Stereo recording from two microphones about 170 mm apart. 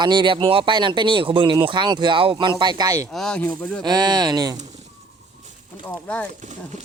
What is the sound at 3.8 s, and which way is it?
Speech, 25° right (ahead or behind).